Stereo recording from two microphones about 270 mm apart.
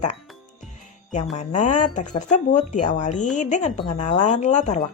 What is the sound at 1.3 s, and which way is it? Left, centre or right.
Speech, left.